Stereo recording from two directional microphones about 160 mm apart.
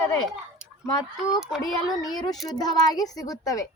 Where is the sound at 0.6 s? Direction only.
5° right (ahead or behind).